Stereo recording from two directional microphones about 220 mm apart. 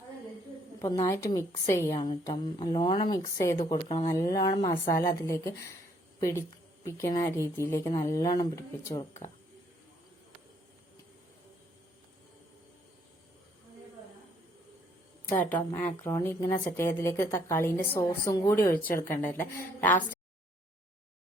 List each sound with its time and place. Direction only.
0.8 s a woman's voice: 15° left (ahead or behind)
15.4 s a woman's voice: 10° left (ahead or behind)